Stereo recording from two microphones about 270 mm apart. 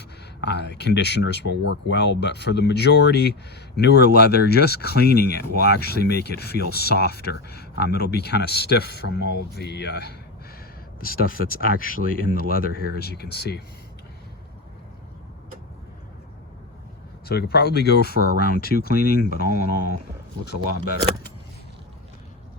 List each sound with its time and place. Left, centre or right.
0.4 s speech: left
17.2 s speech: left